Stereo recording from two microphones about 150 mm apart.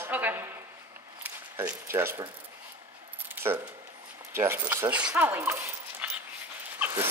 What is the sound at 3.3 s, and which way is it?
Keys jangling, 15° right (ahead or behind).